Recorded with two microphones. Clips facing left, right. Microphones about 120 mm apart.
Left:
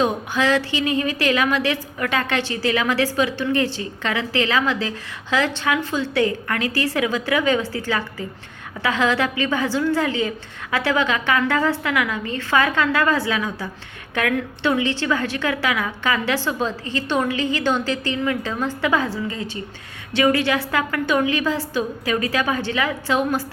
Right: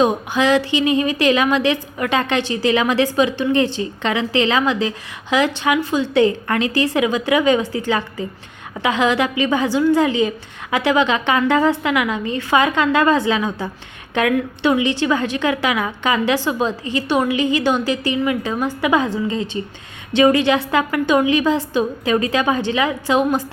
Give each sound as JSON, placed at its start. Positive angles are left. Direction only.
{"t": 0.0, "sound": "a woman's voice", "side_deg": -15}